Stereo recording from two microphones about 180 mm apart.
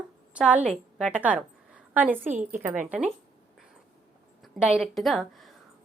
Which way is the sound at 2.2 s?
45° right (ahead or behind).